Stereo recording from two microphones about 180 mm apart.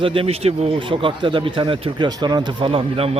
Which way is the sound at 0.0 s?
30° right (ahead or behind).